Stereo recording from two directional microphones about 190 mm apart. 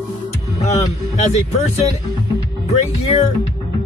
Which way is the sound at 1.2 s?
35° left (ahead or behind).